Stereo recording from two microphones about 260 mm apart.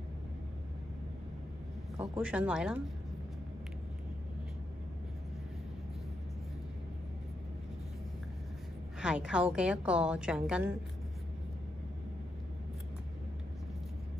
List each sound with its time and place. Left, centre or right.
2.0 s a woman's voice: centre
9.0 s a woman's voice: centre